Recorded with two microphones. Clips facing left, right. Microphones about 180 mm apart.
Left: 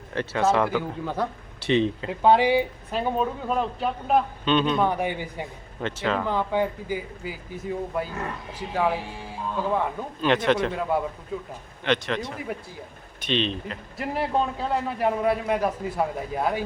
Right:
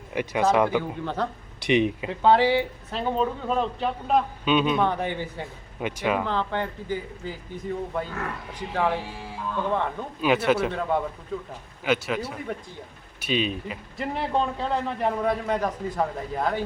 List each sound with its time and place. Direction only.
0.1 s a man's voice: 10° right (ahead or behind)
0.8 s a man's voice: 10° left (ahead or behind)
1.6 s a man's voice: 15° right (ahead or behind)
2.0 s a man's voice: 15° left (ahead or behind)
4.4 s a man's voice: 5° right (ahead or behind)
4.8 s a man's voice: 10° left (ahead or behind)
5.8 s a man's voice: 10° right (ahead or behind)
6.2 s a man's voice: 10° left (ahead or behind)
10.2 s a man's voice: 10° right (ahead or behind)
10.7 s speech: 5° left (ahead or behind)
11.9 s a man's voice: 5° right (ahead or behind)
14.0 s a man's voice: 5° left (ahead or behind)